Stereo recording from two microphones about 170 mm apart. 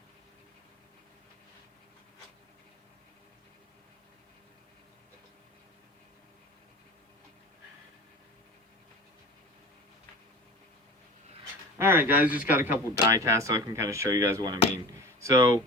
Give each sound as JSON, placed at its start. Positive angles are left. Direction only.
{"t": 11.8, "sound": "speech", "side_deg": -15}